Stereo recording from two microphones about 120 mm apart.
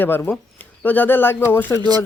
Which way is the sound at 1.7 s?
35° right (ahead or behind).